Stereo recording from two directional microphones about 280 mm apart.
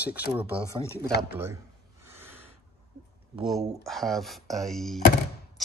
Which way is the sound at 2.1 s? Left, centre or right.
Centre.